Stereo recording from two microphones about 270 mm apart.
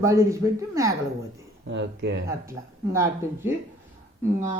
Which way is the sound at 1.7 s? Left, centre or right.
Right.